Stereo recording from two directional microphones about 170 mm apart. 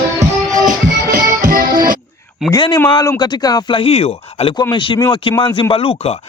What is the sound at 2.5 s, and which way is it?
Speech, 25° left (ahead or behind).